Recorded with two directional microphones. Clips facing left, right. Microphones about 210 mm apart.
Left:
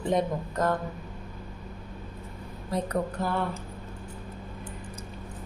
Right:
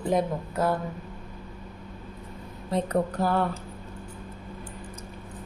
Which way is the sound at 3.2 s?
40° right (ahead or behind).